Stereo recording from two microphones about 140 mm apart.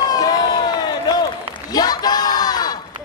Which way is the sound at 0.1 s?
25° left (ahead or behind).